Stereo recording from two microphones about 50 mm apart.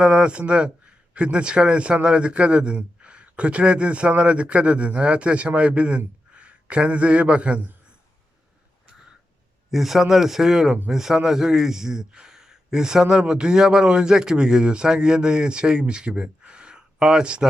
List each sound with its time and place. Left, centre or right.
0.0 s a man's voice: right
9.6 s a man's voice: centre